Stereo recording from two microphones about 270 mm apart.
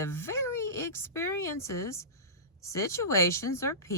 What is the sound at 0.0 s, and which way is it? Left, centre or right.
A woman's voice, centre.